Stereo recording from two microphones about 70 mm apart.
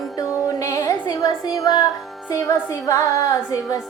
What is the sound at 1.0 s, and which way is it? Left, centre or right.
Speech, left.